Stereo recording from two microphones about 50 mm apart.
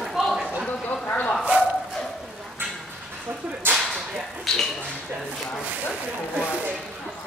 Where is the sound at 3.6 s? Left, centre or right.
Right.